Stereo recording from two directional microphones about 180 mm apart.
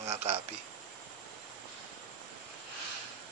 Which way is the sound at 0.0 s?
35° right (ahead or behind).